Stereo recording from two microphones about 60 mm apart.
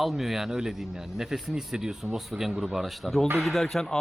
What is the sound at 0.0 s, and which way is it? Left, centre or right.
Speech, centre.